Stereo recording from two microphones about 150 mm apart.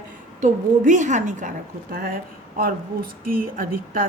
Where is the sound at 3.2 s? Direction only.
70° right (ahead or behind).